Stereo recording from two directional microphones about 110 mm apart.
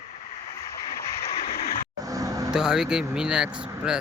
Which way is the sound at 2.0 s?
30° right (ahead or behind).